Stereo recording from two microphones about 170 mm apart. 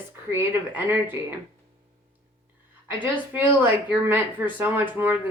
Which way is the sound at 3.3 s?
10° right (ahead or behind).